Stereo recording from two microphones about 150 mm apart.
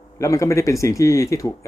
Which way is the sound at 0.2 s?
20° left (ahead or behind).